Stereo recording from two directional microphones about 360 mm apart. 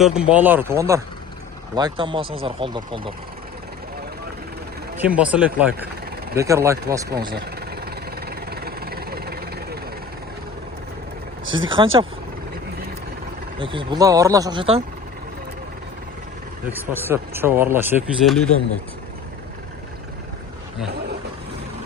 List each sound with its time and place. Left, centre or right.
0.2 s speech: centre
4.9 s speech: centre
7.2 s vehicle: right
11.4 s speech: right
11.7 s speech: centre
13.6 s speech: centre
16.7 s speech: centre